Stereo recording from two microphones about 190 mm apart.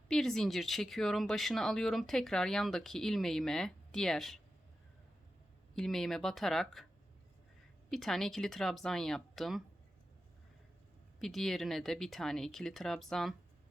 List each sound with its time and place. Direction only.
0.1 s speech: centre (ahead or behind)
5.7 s speech: centre (ahead or behind)
7.9 s speech: centre (ahead or behind)
11.2 s speech: centre (ahead or behind)